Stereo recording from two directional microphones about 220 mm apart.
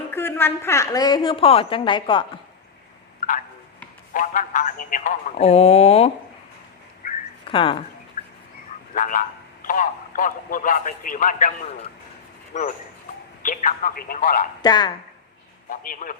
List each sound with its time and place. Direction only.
0.1 s a woman's voice: 10° left (ahead or behind)
3.2 s tick-tock: 35° left (ahead or behind)
4.1 s speech: 35° left (ahead or behind)
7.0 s a sound: 35° left (ahead or behind)
7.5 s a woman's voice: 20° left (ahead or behind)
8.2 s bird: 35° left (ahead or behind)
8.9 s a man's voice: 35° left (ahead or behind)
14.6 s a woman's voice: 20° left (ahead or behind)
15.7 s speech: 40° left (ahead or behind)